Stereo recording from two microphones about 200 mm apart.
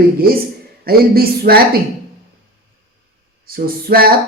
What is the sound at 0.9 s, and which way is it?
Speech, 50° right (ahead or behind).